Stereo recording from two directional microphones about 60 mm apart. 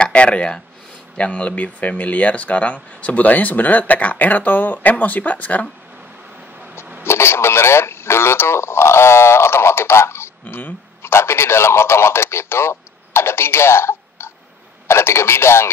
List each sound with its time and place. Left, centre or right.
0.0 s a sound: centre
1.1 s speech: left
7.1 s radio: left
10.4 s speech: left
11.0 s speech: left